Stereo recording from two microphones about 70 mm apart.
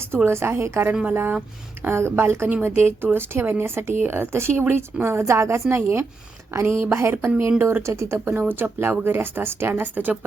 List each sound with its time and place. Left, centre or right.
0.3 s speech: right
1.0 s speech: right
1.8 s speech: right
5.0 s speech: right